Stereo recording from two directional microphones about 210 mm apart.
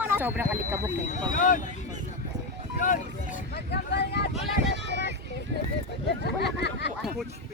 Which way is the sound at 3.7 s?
50° left (ahead or behind).